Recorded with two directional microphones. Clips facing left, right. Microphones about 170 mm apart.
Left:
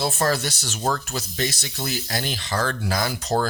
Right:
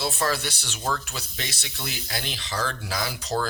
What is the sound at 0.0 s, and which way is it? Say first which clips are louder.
Speech: left 4 dB; 45° left (ahead or behind).